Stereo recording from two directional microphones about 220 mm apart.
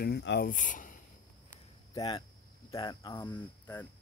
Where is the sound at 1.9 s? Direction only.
20° left (ahead or behind).